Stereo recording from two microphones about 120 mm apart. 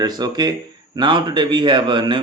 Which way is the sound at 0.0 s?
35° right (ahead or behind).